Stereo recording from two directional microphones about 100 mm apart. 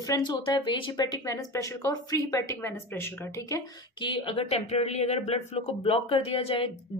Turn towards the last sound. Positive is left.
turn(degrees=70)  # may be behind; listen again after turning